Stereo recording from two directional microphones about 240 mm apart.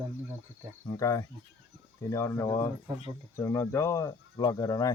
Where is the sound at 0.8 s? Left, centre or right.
Centre.